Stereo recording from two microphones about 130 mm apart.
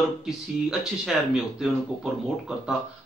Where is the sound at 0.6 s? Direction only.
5° right (ahead or behind).